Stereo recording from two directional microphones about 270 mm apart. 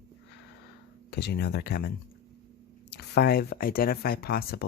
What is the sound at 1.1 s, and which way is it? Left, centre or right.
Speech, left.